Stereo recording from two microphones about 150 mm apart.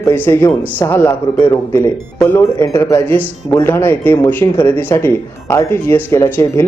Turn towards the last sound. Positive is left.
turn(degrees=15)  # may be behind; listen again after turning